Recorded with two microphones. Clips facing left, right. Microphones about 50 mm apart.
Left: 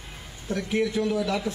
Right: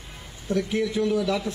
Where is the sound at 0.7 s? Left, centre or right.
Centre.